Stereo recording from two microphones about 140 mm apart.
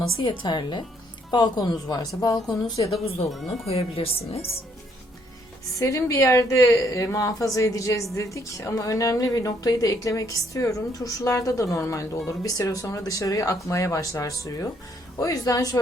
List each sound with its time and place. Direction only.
0.2 s a woman's voice: 35° left (ahead or behind)
3.2 s speech: centre (ahead or behind)
3.7 s a woman's voice: 45° left (ahead or behind)
5.8 s a woman's voice: 20° left (ahead or behind)